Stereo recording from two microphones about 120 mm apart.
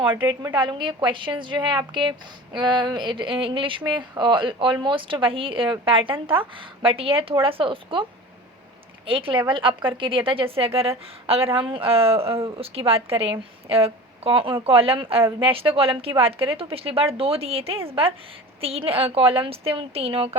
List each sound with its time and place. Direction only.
0.3 s a woman's voice: 45° right (ahead or behind)
9.0 s a woman's voice: 45° right (ahead or behind)